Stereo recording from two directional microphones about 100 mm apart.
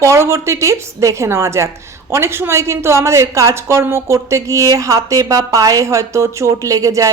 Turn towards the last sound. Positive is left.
turn(degrees=-35)  # may be behind; listen again after turning